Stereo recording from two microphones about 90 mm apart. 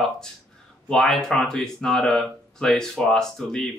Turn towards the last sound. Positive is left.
turn(degrees=5)  # may be behind; listen again after turning